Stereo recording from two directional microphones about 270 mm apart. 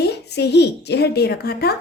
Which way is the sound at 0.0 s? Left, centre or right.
Left.